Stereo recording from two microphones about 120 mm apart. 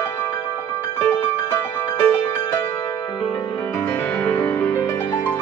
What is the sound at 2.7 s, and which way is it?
Music, 30° left (ahead or behind).